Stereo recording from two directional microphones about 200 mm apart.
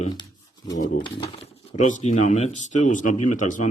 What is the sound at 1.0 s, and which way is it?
Speech, 25° left (ahead or behind).